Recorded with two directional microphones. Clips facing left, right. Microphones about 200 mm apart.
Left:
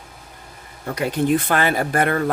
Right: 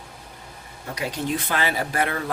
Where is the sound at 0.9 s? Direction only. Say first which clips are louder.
Left 8 dB; 55° left (ahead or behind).